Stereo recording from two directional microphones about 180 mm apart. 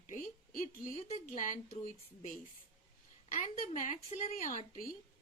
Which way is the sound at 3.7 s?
40° left (ahead or behind).